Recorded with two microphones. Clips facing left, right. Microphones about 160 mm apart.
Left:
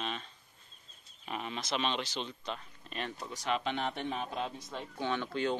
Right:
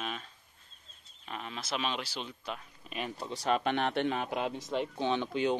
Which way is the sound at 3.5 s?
60° right (ahead or behind).